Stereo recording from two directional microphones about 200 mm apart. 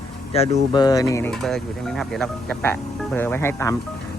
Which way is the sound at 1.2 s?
Centre (ahead or behind).